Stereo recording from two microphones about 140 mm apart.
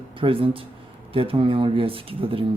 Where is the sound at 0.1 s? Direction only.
40° right (ahead or behind).